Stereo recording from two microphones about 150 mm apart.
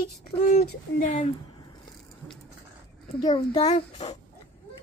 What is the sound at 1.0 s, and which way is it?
Speech, 40° left (ahead or behind).